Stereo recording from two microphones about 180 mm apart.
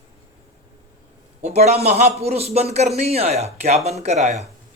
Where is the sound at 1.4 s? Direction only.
35° right (ahead or behind).